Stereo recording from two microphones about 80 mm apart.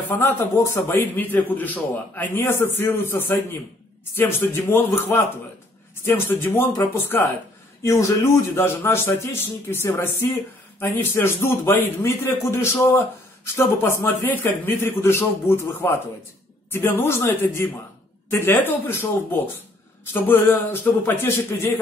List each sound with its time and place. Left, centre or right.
0.1 s a man's voice: left